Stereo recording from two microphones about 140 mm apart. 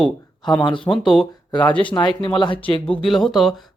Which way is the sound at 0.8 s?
Centre (ahead or behind).